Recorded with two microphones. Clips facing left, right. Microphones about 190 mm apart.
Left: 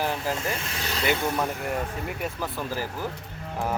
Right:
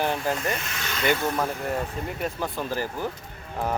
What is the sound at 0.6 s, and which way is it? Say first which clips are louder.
Speech: left 1 dB; 35° left (ahead or behind).